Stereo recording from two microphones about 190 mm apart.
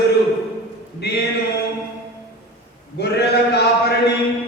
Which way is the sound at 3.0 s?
60° left (ahead or behind).